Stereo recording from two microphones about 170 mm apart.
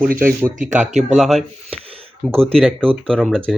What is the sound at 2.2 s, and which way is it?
Speech, 10° left (ahead or behind).